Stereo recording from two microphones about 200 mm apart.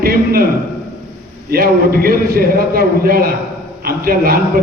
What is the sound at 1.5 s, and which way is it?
A man's voice, 50° right (ahead or behind).